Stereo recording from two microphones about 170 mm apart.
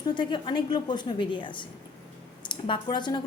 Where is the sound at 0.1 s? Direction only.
25° left (ahead or behind).